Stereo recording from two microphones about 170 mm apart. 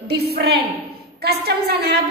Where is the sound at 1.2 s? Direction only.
70° right (ahead or behind).